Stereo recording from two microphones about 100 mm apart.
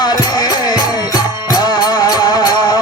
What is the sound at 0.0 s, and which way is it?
Music, 40° left (ahead or behind).